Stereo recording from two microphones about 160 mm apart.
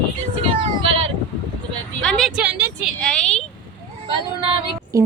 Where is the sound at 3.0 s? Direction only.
5° left (ahead or behind).